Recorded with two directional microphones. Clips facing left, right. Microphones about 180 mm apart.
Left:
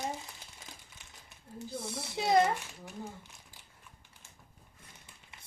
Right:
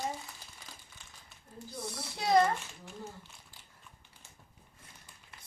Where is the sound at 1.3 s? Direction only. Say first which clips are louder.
Left 6 dB; 25° left (ahead or behind).